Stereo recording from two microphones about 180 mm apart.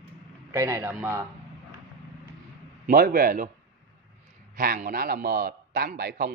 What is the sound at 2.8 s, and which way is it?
Speech, 50° right (ahead or behind).